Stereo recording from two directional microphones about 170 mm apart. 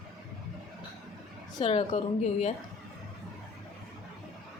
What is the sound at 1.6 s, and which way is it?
Speech, 35° left (ahead or behind).